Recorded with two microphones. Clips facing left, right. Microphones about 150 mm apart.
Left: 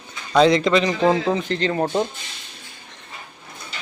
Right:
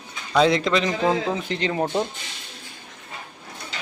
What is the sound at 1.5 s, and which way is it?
Speech, 10° right (ahead or behind).